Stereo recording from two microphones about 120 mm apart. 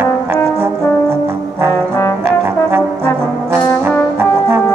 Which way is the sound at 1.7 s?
25° left (ahead or behind).